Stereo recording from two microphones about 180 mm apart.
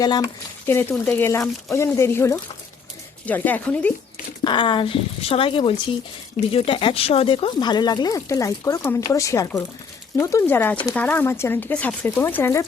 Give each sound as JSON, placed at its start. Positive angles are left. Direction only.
{"t": 0.0, "sound": "speech", "side_deg": 20}
{"t": 4.4, "sound": "speech", "side_deg": 25}